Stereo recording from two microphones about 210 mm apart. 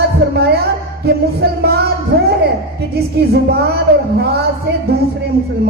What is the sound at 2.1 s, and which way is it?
Music, 50° right (ahead or behind).